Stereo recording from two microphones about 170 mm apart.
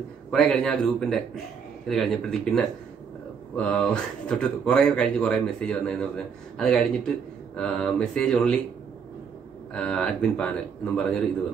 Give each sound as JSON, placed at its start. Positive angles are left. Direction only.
{"t": 0.3, "sound": "speech", "side_deg": 5}
{"t": 9.8, "sound": "speech", "side_deg": 5}